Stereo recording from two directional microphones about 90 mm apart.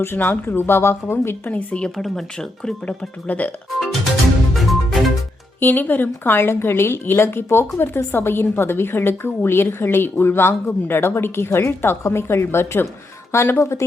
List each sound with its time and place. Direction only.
0.0 s a woman's voice: 25° left (ahead or behind)
1.5 s speech: 15° left (ahead or behind)
4.5 s music: centre (ahead or behind)
5.5 s a woman's voice: 20° left (ahead or behind)